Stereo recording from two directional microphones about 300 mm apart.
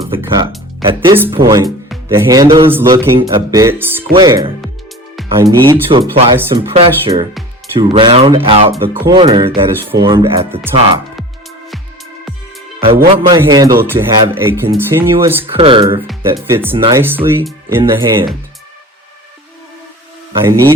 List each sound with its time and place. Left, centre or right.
0.1 s speech: centre
13.1 s speech: centre
15.5 s speech: centre
20.3 s speech: centre